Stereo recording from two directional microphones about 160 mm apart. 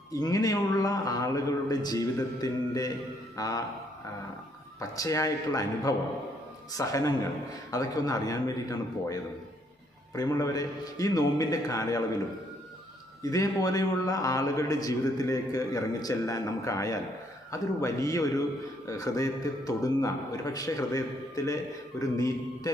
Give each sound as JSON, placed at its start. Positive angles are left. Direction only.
{"t": 0.1, "sound": "a man's voice", "side_deg": 20}
{"t": 4.8, "sound": "a man's voice", "side_deg": 20}
{"t": 10.2, "sound": "a man's voice", "side_deg": 20}
{"t": 13.3, "sound": "a man's voice", "side_deg": 20}